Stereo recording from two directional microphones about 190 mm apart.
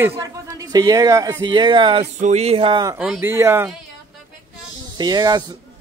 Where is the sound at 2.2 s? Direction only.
35° right (ahead or behind).